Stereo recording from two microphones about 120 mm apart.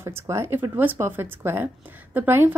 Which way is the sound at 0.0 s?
20° right (ahead or behind).